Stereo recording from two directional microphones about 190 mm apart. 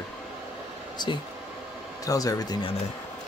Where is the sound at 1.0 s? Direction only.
20° left (ahead or behind).